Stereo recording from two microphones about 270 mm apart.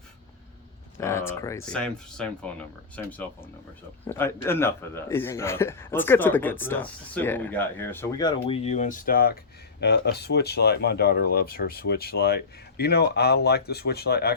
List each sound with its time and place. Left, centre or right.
0.9 s a man's voice: centre; by 14.3 s left